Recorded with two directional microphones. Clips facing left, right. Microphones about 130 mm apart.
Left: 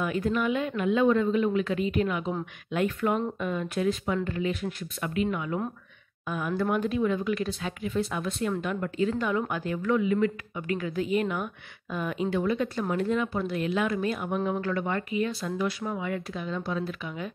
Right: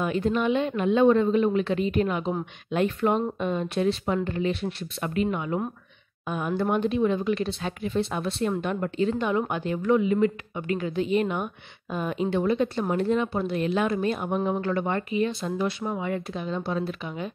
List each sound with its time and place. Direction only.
0.0 s speech: 25° right (ahead or behind)